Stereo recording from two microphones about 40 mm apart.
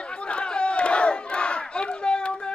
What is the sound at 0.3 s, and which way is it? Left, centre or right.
Battle cry, left.